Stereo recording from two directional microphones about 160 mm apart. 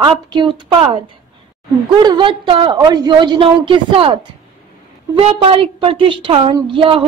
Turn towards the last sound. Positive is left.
turn(degrees=-35)  # may be behind; listen again after turning